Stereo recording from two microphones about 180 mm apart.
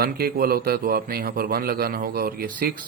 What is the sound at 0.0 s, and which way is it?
A man's voice, 55° right (ahead or behind).